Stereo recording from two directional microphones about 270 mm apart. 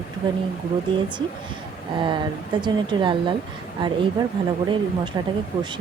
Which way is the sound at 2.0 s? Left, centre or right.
Centre.